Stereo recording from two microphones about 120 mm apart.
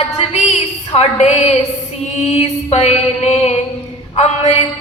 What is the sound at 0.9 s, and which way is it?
Music, 60° left (ahead or behind).